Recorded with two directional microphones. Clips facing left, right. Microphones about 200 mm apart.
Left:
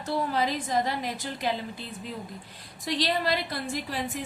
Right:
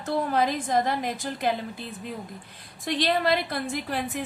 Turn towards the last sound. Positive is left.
turn(degrees=-55)  # may be behind; listen again after turning